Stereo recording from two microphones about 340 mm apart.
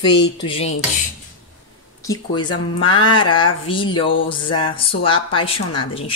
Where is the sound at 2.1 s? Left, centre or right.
Centre.